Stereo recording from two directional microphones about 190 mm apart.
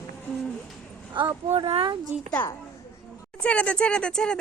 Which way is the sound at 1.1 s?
25° right (ahead or behind).